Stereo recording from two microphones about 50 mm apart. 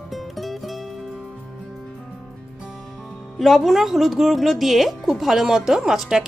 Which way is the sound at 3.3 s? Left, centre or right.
Centre.